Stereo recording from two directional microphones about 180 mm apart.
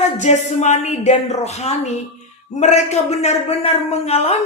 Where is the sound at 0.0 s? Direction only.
40° left (ahead or behind).